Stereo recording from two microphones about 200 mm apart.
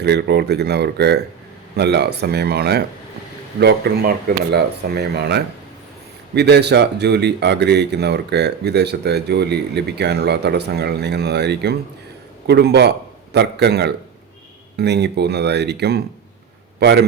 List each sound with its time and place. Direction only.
0.0 s speech: 55° right (ahead or behind)